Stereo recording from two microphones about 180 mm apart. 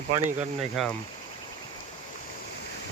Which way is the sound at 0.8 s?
Centre (ahead or behind).